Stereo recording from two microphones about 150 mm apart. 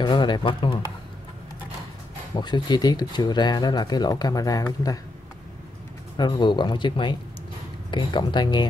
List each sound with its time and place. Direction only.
0.0 s speech: 30° left (ahead or behind)
2.3 s speech: 30° left (ahead or behind)
6.1 s speech: 30° left (ahead or behind)